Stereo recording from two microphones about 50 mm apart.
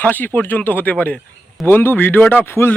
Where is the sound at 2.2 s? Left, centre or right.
Left.